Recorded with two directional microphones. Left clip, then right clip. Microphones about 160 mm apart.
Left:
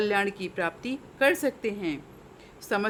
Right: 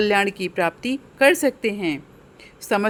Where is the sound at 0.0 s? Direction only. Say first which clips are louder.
Right 7 dB; 40° right (ahead or behind).